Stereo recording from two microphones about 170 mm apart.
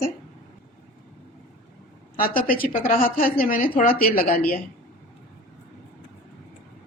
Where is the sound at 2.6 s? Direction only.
55° left (ahead or behind).